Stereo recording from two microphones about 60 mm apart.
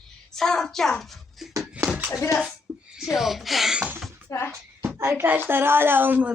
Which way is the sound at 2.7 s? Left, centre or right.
Right.